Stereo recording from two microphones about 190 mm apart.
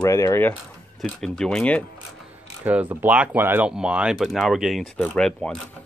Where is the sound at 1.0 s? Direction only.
5° left (ahead or behind).